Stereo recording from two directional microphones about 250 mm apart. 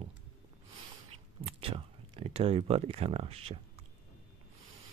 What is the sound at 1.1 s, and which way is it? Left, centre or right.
Speech, right.